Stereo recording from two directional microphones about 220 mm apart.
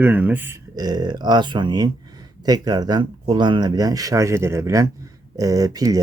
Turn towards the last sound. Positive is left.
turn(degrees=-15)  # may be behind; listen again after turning